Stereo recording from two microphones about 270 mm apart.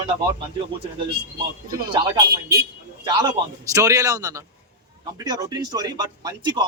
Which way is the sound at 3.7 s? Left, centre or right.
Centre.